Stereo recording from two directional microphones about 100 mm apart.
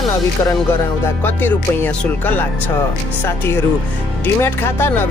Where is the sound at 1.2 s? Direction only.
20° left (ahead or behind).